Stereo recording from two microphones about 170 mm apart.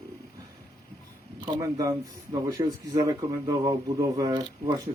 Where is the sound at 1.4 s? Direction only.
25° right (ahead or behind).